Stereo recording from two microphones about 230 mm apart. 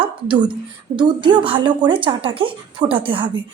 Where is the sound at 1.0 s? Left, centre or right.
Right.